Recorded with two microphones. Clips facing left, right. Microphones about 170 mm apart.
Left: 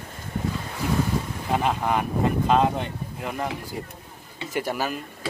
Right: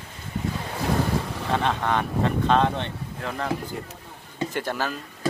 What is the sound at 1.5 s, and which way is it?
Speech, 5° left (ahead or behind).